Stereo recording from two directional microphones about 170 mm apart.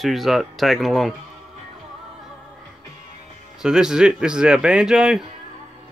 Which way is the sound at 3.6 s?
5° right (ahead or behind).